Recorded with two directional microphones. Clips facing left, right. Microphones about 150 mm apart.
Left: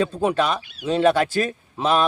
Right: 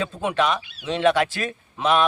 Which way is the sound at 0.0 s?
35° left (ahead or behind).